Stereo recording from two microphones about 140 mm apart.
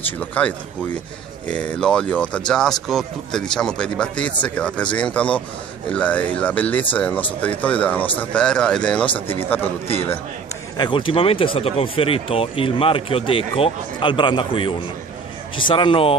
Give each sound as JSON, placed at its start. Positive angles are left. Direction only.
{"t": 0.2, "sound": "speech", "side_deg": 10}
{"t": 10.8, "sound": "speech", "side_deg": 35}